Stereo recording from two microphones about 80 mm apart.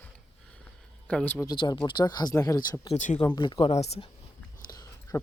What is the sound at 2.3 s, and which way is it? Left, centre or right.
Speech, left.